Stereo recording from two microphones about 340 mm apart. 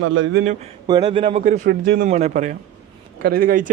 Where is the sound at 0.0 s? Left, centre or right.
Right.